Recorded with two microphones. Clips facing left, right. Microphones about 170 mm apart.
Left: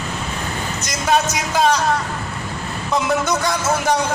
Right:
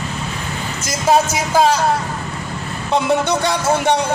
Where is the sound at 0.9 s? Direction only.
30° right (ahead or behind).